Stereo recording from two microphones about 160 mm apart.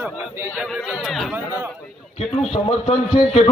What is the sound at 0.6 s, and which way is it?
Chatter, centre (ahead or behind).